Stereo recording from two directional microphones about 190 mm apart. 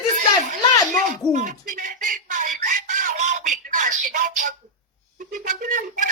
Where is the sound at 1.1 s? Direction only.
40° right (ahead or behind).